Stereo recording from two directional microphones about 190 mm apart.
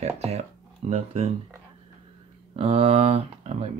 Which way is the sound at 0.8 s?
35° right (ahead or behind).